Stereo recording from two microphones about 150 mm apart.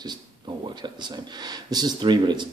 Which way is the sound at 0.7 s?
30° right (ahead or behind).